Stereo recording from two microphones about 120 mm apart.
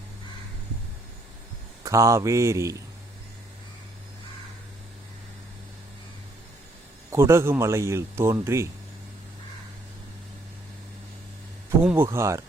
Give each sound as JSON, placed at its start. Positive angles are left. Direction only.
{"t": 1.8, "sound": "speech", "side_deg": -25}
{"t": 7.1, "sound": "speech", "side_deg": -20}
{"t": 11.8, "sound": "speech", "side_deg": -15}